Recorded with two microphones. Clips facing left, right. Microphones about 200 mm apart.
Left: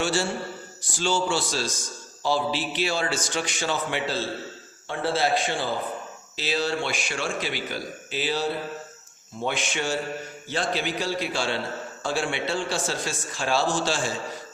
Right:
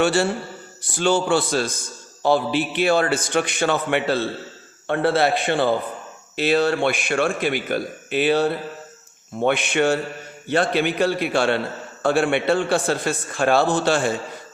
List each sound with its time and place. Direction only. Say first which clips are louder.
0.0 s a man's voice: right 6 dB; 60° right (ahead or behind)